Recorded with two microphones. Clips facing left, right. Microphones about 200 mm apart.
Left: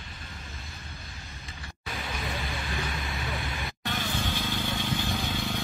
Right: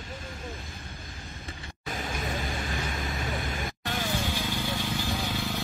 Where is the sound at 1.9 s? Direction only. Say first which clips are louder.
Right 2 dB; 45° right (ahead or behind).